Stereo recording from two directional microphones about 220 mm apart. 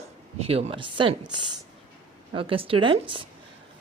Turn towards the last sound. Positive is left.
turn(degrees=-25)  # may be behind; listen again after turning